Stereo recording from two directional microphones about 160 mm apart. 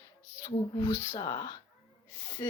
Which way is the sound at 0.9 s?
20° left (ahead or behind).